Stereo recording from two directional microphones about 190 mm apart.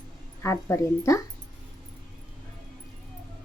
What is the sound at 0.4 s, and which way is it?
Speech, 15° left (ahead or behind).